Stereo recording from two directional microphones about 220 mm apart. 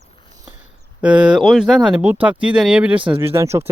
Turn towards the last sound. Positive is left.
turn(degrees=-10)  # may be behind; listen again after turning